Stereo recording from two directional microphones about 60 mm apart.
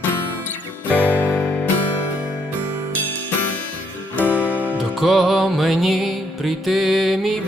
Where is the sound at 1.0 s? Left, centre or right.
Left.